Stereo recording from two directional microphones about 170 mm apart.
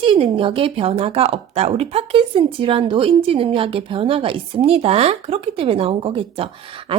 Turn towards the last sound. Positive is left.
turn(degrees=-30)  # may be behind; listen again after turning